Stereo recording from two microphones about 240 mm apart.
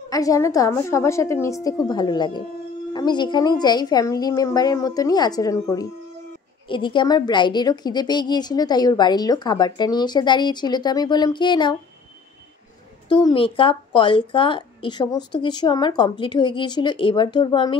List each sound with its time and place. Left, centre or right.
0.1 s a woman's voice: centre
13.1 s a woman's voice: left